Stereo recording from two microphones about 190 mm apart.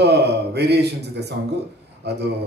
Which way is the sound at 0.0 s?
60° right (ahead or behind).